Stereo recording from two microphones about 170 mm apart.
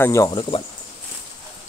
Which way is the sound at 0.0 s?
15° left (ahead or behind).